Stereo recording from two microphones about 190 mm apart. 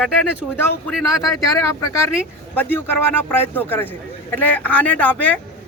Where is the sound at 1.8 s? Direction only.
15° left (ahead or behind).